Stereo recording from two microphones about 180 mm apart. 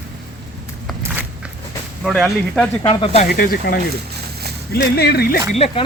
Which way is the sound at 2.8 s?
35° left (ahead or behind).